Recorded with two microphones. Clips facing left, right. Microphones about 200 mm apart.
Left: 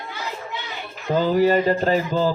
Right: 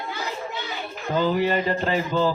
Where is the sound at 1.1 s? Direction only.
40° left (ahead or behind).